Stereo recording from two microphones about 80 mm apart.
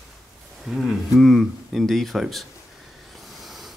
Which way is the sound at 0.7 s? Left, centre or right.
Centre.